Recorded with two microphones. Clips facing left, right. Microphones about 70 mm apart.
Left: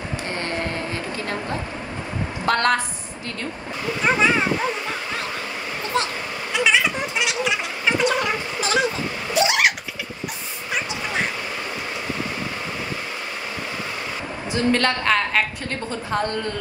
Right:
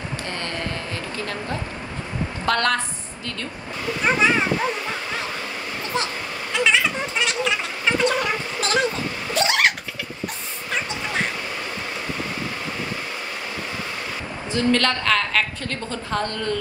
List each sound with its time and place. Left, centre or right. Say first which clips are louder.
2.4 s a woman's voice: left 2 dB; left
3.8 s speech: even; centre
6.5 s a sound: left 1 dB; centre
8.1 s a sound: left 1 dB; centre
9.3 s vehicle: left 1 dB; centre
14.5 s a woman's voice: even; left